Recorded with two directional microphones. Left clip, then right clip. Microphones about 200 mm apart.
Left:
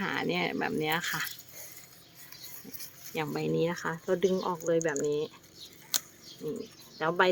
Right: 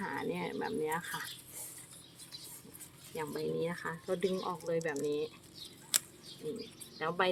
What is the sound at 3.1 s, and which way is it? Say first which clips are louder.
Speech: left 6 dB; 50° left (ahead or behind).